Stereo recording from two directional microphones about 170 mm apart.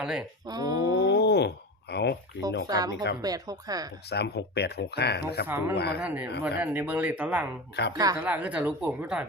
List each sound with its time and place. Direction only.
0.0 s speech: 5° right (ahead or behind)
0.4 s speech: 20° right (ahead or behind)
0.9 s a sound: 85° left
2.6 s speech: 20° right (ahead or behind)
2.9 s speech: 90° left
3.2 s speech: 20° right (ahead or behind)
4.1 s speech: 75° left (ahead or behind)
5.5 s speech: 10° right (ahead or behind)
5.7 s speech: 75° left (ahead or behind)
6.0 s speech: 10° right (ahead or behind)
7.8 s speech: 80° left
8.1 s speech: 10° right (ahead or behind)